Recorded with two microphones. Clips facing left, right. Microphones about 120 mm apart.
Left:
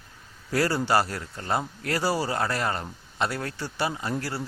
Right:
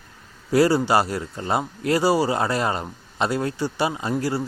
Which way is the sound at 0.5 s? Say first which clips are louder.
Right 6 dB; 15° right (ahead or behind).